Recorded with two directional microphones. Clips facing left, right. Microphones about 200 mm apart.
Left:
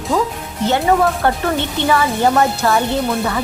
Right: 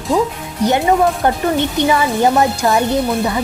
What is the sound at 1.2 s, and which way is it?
Speech, 15° right (ahead or behind).